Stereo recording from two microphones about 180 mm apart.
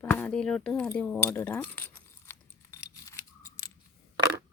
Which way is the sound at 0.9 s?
10° left (ahead or behind).